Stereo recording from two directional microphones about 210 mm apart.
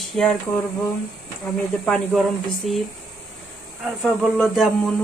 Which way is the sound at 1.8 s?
5° left (ahead or behind).